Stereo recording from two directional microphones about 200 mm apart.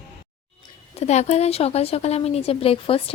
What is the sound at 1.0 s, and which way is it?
Speech, 35° left (ahead or behind).